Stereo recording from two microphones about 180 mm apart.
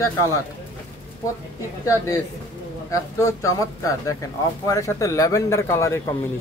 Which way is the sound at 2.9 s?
15° left (ahead or behind).